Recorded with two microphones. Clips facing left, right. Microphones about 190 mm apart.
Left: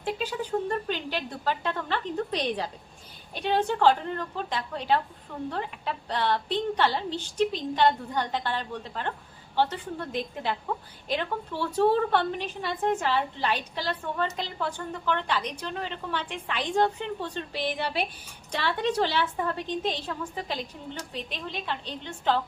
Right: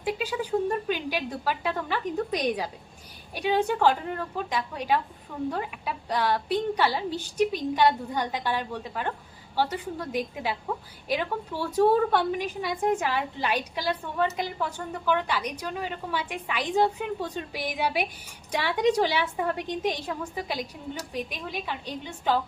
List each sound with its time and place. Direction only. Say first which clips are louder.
0.0 s a woman's voice: right 2 dB; 10° right (ahead or behind)